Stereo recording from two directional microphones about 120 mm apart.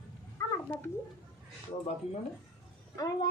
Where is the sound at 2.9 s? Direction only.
35° left (ahead or behind).